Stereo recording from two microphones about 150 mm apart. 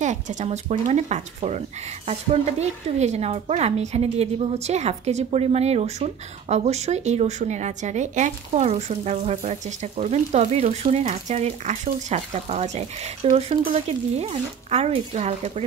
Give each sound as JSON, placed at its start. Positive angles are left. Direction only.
{"t": 0.0, "sound": "a woman's voice", "side_deg": -55}